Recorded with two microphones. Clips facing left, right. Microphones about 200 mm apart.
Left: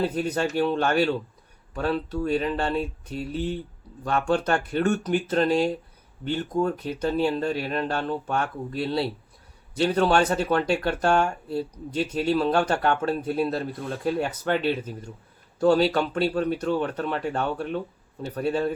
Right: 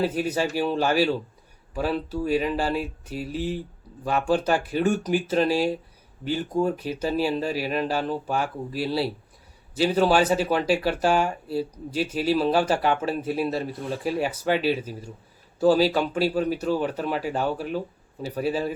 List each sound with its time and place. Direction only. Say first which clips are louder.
0.0 s speech: right 1 dB; 5° right (ahead or behind)